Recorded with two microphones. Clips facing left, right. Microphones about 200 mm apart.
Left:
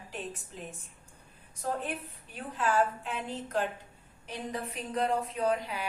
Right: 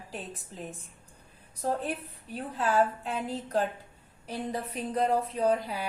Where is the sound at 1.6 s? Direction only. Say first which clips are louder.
Right 3 dB; 35° right (ahead or behind).